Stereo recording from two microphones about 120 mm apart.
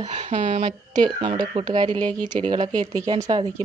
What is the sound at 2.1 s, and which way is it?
Speech, 10° left (ahead or behind).